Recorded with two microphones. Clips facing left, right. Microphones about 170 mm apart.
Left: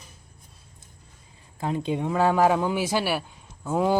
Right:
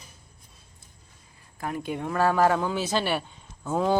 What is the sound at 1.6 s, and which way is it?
Speech, 20° left (ahead or behind).